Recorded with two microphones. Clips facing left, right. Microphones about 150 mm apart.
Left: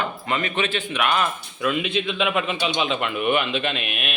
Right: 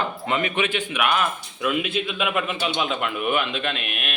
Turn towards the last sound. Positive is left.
turn(degrees=0)  # may be behind; listen again after turning